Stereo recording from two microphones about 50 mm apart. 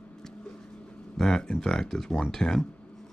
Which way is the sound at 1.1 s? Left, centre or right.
Centre.